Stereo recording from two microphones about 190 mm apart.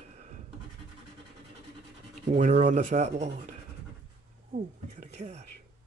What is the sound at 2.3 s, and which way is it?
Speech, 40° right (ahead or behind).